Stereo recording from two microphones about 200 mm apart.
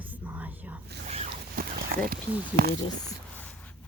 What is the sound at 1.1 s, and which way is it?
Zipper, 30° right (ahead or behind).